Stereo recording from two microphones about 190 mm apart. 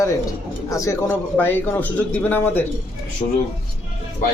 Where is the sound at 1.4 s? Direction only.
10° left (ahead or behind).